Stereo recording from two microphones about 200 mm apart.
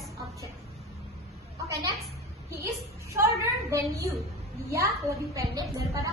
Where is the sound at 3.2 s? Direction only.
15° right (ahead or behind).